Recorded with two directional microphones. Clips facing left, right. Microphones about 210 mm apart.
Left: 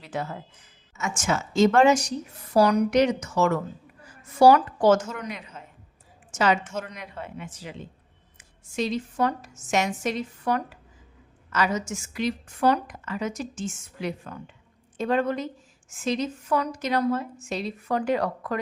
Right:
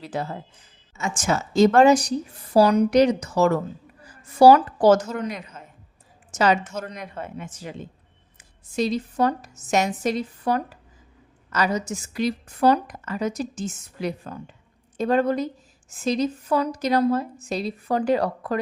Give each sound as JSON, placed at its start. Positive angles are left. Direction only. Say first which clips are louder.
{"t": 0.0, "sound": "a woman's voice", "louder": "right 3 dB", "side_deg": -35}